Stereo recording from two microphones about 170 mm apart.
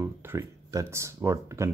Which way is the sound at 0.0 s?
15° right (ahead or behind).